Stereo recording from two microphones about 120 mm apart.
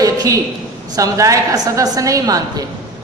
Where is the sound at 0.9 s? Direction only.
30° right (ahead or behind).